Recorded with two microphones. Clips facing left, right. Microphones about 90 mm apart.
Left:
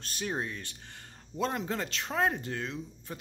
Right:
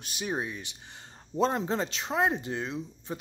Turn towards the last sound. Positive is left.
turn(degrees=-20)  # may be behind; listen again after turning